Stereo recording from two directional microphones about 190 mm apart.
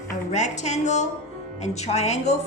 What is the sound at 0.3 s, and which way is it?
A woman's voice, 40° left (ahead or behind).